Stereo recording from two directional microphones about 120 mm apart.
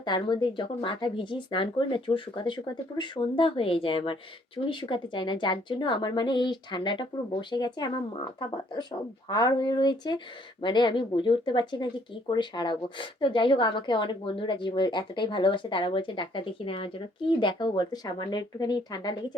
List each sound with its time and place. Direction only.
0.0 s a woman's voice: 40° left (ahead or behind)